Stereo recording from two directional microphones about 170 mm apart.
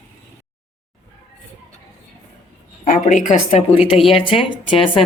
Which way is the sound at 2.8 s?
50° left (ahead or behind).